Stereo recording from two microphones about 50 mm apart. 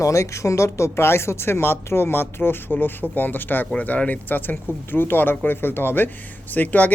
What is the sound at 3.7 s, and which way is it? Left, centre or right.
Speech, left.